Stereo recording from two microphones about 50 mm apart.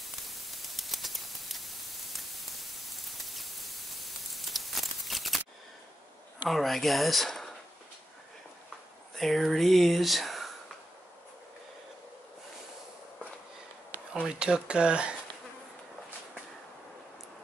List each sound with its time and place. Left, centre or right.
0.0 s a sound: centre
6.5 s speech: centre
9.1 s speech: centre
14.2 s speech: centre